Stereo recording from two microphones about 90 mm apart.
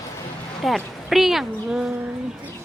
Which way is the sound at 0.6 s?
Centre (ahead or behind).